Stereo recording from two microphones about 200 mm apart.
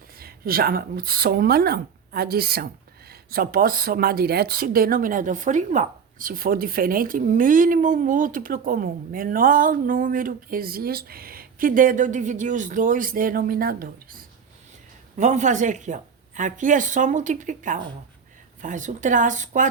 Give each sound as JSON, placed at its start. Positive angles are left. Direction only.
{"t": 0.2, "sound": "a woman's voice", "side_deg": -50}